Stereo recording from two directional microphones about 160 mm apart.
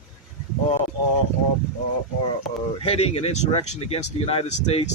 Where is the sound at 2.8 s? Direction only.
40° left (ahead or behind).